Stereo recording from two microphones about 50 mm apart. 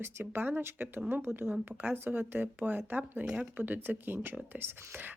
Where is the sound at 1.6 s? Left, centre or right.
Right.